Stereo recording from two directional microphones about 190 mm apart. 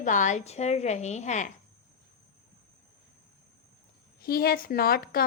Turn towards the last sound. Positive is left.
turn(degrees=50)  # may be behind; listen again after turning